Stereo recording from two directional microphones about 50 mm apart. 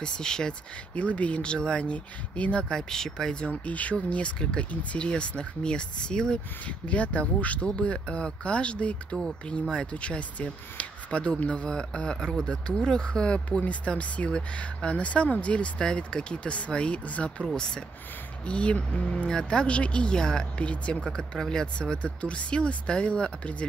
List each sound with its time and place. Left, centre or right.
0.0 s speech: centre
0.9 s speech: left
2.7 s speech: centre
6.9 s speech: left
9.1 s speech: centre
17.5 s speech: centre
20.6 s speech: left